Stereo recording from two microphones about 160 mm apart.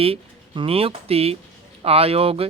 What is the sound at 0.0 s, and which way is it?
Speech, 35° right (ahead or behind).